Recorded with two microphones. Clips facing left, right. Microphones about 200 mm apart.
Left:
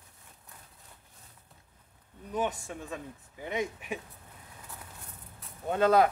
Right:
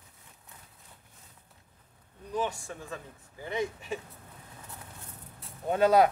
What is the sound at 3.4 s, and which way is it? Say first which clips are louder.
Speech: right 1 dB; 15° left (ahead or behind).